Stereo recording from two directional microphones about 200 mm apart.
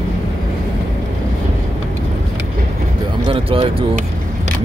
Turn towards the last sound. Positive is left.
turn(degrees=-25)  # may be behind; listen again after turning